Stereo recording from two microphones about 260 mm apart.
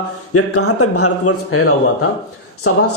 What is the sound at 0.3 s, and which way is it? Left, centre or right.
Speech, left.